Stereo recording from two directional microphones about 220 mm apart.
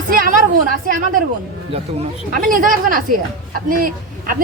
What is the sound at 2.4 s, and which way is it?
Speech, 40° right (ahead or behind).